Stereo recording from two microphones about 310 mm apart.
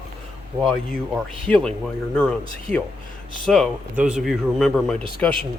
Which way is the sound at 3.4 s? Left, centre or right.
Centre.